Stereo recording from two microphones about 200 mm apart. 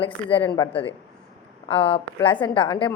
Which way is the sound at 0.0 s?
25° left (ahead or behind).